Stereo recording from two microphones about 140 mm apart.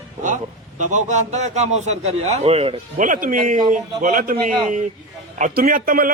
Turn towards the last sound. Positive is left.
turn(degrees=-85)